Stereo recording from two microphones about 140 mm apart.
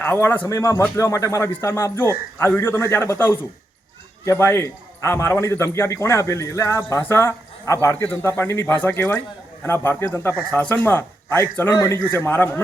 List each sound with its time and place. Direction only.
0.0 s a man's voice: 15° left (ahead or behind)